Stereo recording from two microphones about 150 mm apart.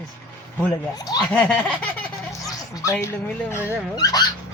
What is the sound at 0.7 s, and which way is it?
Speech, 25° left (ahead or behind).